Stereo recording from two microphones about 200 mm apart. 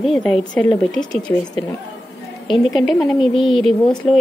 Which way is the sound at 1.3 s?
15° left (ahead or behind).